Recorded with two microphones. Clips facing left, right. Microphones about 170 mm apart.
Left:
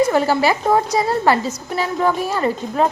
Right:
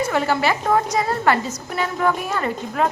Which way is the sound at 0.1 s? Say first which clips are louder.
Left 4 dB; 35° left (ahead or behind).